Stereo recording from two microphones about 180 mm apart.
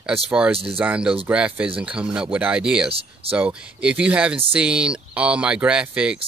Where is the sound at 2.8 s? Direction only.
30° right (ahead or behind).